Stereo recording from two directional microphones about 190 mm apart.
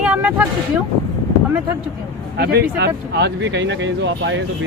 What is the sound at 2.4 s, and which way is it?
Speech, 60° right (ahead or behind).